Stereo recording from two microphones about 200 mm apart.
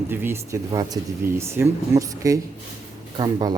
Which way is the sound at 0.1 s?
10° right (ahead or behind).